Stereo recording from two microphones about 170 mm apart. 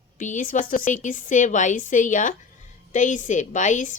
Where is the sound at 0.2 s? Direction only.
50° left (ahead or behind).